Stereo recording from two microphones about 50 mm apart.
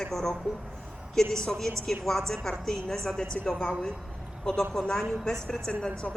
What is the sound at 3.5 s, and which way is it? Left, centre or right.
A woman's voice, centre.